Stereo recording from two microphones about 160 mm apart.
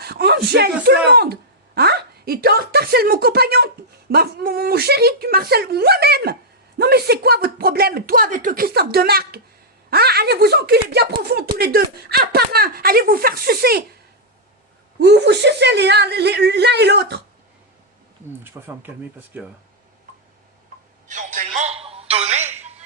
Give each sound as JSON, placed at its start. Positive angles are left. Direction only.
{"t": 0.0, "sound": "speech", "side_deg": -85}
{"t": 14.9, "sound": "a woman's voice", "side_deg": -90}
{"t": 18.4, "sound": "speech", "side_deg": -15}
{"t": 21.1, "sound": "a sound", "side_deg": -50}